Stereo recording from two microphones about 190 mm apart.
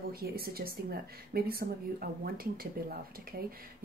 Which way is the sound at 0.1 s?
50° right (ahead or behind).